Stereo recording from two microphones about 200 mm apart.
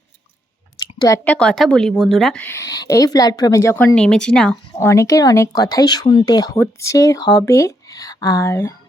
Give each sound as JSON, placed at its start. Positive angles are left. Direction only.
{"t": 0.8, "sound": "speech", "side_deg": 20}
{"t": 4.9, "sound": "speech", "side_deg": 15}